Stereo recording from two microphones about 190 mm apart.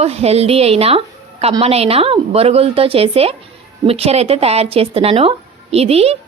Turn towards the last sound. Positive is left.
turn(degrees=-30)  # may be behind; listen again after turning